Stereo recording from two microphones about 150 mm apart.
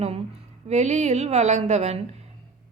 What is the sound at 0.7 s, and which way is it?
Speech, 50° right (ahead or behind).